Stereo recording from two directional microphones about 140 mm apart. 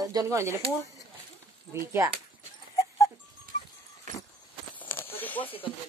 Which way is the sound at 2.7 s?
20° left (ahead or behind).